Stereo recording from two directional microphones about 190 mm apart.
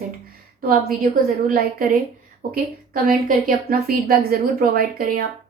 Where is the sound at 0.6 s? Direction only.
50° right (ahead or behind).